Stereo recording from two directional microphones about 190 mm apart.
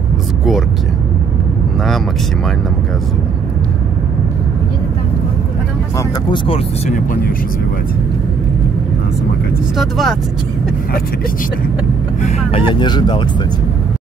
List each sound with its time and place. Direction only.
5.9 s speech: 25° left (ahead or behind)
9.8 s speech: centre (ahead or behind)
12.2 s speech: 35° left (ahead or behind)